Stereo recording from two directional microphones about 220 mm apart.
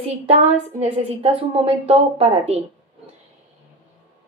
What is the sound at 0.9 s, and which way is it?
A woman's voice, 25° right (ahead or behind).